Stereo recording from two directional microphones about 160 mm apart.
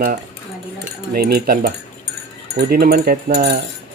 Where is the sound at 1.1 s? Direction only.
70° right (ahead or behind).